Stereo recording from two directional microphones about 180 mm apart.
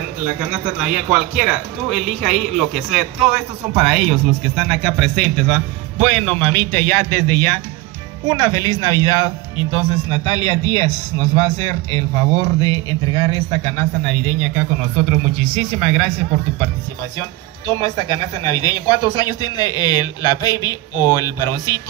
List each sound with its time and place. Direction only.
0.4 s a man's voice: 5° right (ahead or behind); by 14.2 s 10° left (ahead or behind)
15.0 s a man's voice: centre (ahead or behind)
17.6 s speech: 20° left (ahead or behind)